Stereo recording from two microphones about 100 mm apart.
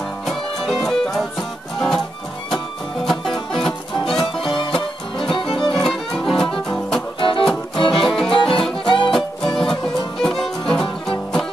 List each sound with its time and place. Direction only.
0.3 s music: centre (ahead or behind)
3.5 s music: 5° left (ahead or behind)
4.4 s music: 55° left (ahead or behind)
5.6 s music: 5° left (ahead or behind)
7.2 s music: 55° left (ahead or behind)
8.0 s music: 5° left (ahead or behind)
8.3 s music: 60° left (ahead or behind)
9.1 s music: 5° left (ahead or behind)